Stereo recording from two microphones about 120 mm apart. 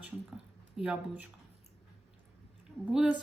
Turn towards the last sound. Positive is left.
turn(degrees=-10)  # may be behind; listen again after turning